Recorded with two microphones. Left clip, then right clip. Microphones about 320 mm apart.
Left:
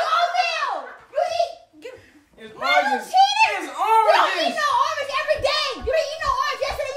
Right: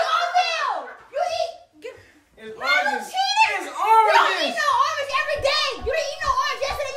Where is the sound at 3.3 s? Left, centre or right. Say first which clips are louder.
Even; centre.